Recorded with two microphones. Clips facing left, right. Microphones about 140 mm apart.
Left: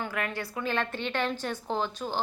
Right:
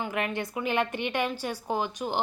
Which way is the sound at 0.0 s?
15° right (ahead or behind).